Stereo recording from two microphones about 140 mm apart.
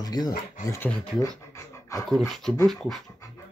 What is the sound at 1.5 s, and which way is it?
Pant, 20° left (ahead or behind).